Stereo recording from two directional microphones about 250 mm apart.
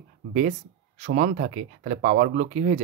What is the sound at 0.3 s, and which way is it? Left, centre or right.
Speech, right.